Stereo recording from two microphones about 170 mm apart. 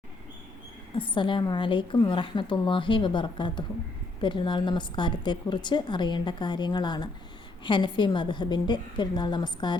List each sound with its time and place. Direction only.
0.9 s a woman's voice: 30° left (ahead or behind)